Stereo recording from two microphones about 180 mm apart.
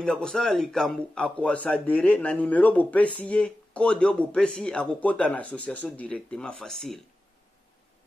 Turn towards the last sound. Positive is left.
turn(degrees=5)  # may be behind; listen again after turning